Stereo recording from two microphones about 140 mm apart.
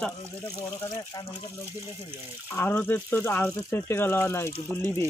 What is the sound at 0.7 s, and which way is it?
Speech, 25° left (ahead or behind).